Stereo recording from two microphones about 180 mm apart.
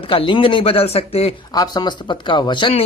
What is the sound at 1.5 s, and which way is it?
Speech, 20° left (ahead or behind).